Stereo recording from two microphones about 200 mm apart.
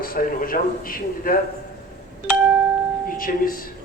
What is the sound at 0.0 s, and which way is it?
A man's voice, 45° left (ahead or behind).